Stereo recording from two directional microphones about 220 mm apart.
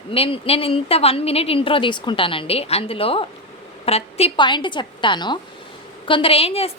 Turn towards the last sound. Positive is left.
turn(degrees=25)  # may be behind; listen again after turning